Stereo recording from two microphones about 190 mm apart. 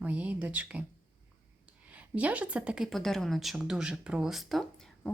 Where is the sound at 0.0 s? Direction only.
5° right (ahead or behind).